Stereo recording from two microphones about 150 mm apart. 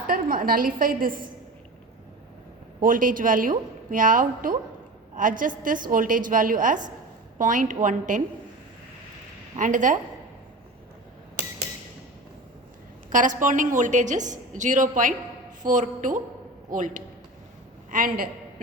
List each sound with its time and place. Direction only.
0.1 s a woman's voice: 70° right (ahead or behind)
2.8 s a woman's voice: 65° right (ahead or behind)
9.6 s a woman's voice: 60° right (ahead or behind)
13.1 s a woman's voice: 60° right (ahead or behind)